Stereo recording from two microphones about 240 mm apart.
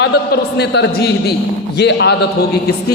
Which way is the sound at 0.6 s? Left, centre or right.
Left.